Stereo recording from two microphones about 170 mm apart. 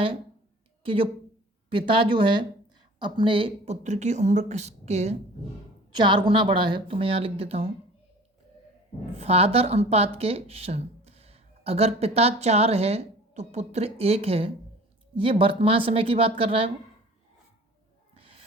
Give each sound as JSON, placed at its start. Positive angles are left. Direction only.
{"t": 0.8, "sound": "a woman's voice", "side_deg": -30}
{"t": 6.0, "sound": "speech", "side_deg": -30}
{"t": 9.1, "sound": "speech", "side_deg": -35}